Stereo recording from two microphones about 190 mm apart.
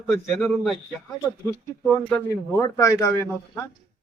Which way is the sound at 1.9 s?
15° left (ahead or behind).